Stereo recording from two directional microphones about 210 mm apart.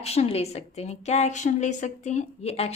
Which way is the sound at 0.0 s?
30° left (ahead or behind).